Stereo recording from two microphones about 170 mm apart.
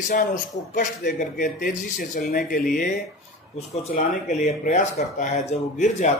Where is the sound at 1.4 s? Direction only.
50° left (ahead or behind).